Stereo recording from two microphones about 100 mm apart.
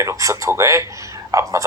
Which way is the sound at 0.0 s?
30° right (ahead or behind).